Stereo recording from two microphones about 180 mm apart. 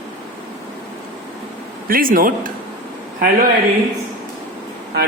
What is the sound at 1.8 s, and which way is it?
Speech, 55° right (ahead or behind).